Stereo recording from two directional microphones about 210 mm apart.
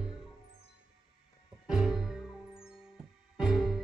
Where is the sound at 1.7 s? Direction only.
5° right (ahead or behind).